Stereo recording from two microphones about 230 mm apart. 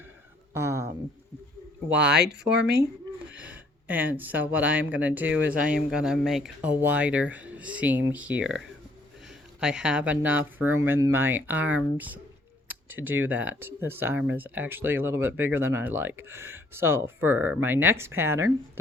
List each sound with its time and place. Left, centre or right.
0.5 s speech: centre
2.1 s speech: right
3.2 s speech: centre